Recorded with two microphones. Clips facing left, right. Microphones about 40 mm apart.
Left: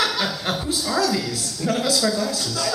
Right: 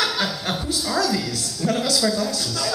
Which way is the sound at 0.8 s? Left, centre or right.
Centre.